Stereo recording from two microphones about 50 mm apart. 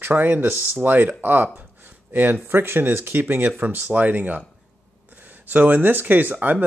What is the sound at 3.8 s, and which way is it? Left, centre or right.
Speech, right.